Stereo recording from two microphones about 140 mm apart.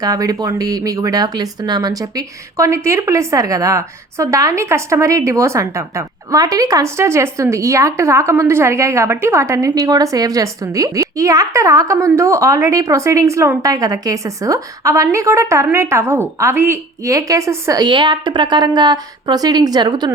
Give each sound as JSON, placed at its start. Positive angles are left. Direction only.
{"t": 0.0, "sound": "speech", "side_deg": -25}